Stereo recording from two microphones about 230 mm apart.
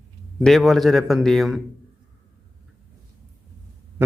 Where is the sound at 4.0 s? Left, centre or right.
Centre.